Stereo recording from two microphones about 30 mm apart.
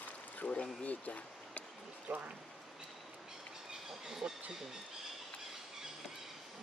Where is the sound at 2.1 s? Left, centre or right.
Right.